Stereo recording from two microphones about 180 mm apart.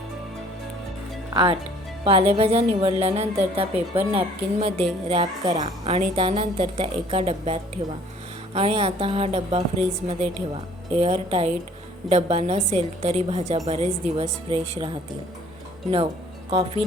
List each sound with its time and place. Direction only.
1.3 s a woman's voice: 25° right (ahead or behind)
16.5 s a woman's voice: 35° right (ahead or behind)